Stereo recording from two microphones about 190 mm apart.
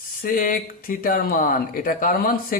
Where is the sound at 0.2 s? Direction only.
45° left (ahead or behind).